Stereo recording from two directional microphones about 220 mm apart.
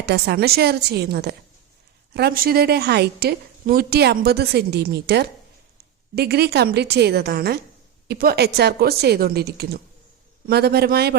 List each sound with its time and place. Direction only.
0.0 s a woman's voice: 50° right (ahead or behind)